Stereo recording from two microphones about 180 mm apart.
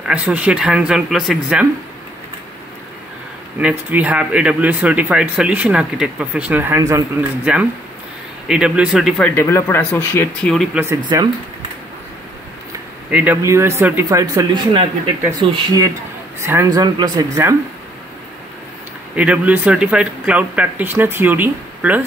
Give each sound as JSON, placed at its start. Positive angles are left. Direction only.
{"t": 0.0, "sound": "speech", "side_deg": -5}
{"t": 3.5, "sound": "speech", "side_deg": -10}
{"t": 9.2, "sound": "speech", "side_deg": 15}
{"t": 10.5, "sound": "speech", "side_deg": 0}
{"t": 10.8, "sound": "speech", "side_deg": -15}
{"t": 13.1, "sound": "speech", "side_deg": -10}
{"t": 19.1, "sound": "speech", "side_deg": -5}